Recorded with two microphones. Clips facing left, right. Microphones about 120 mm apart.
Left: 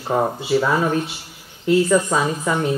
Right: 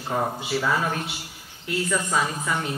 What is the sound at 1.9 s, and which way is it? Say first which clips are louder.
Speech: left 7 dB; 35° left (ahead or behind).